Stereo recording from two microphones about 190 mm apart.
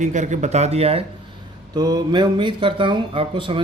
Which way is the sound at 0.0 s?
40° right (ahead or behind).